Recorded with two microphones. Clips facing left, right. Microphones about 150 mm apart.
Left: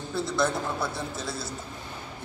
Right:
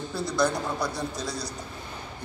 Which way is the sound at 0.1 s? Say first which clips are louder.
Right 1 dB; centre (ahead or behind).